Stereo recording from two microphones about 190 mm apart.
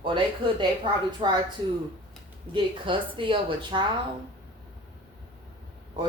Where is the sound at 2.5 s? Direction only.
25° right (ahead or behind).